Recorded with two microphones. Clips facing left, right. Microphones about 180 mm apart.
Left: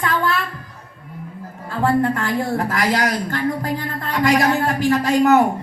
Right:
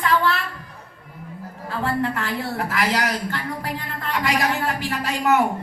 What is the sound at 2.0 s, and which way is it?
A man's voice, 45° left (ahead or behind).